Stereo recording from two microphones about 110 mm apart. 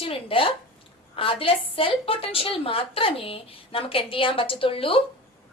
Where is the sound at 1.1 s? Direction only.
55° left (ahead or behind).